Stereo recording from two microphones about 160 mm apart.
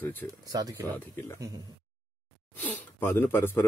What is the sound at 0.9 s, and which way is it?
Speech, 15° left (ahead or behind).